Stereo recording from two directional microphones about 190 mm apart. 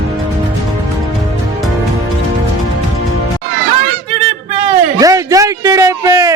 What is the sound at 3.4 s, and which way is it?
Music, 75° right (ahead or behind).